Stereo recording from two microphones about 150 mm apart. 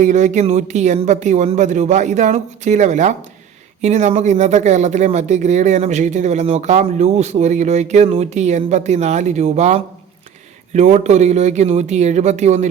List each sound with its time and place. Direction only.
0.0 s speech: 55° right (ahead or behind)